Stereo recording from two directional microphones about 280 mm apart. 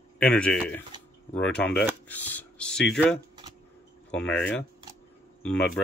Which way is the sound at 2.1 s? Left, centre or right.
Centre.